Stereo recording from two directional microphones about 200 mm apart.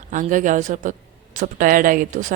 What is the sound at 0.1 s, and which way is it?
A woman's voice, 40° right (ahead or behind).